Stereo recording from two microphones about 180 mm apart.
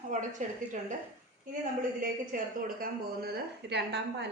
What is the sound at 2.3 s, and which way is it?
A woman's voice, 50° right (ahead or behind).